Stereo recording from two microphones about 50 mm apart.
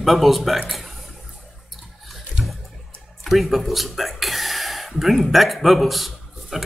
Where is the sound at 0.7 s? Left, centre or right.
Centre.